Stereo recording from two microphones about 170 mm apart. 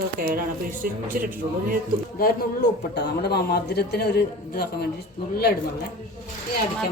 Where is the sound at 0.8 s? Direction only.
55° right (ahead or behind).